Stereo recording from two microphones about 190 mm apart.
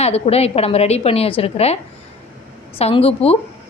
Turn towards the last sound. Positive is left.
turn(degrees=30)  # may be behind; listen again after turning